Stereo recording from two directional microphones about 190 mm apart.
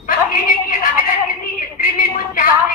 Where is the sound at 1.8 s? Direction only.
45° left (ahead or behind).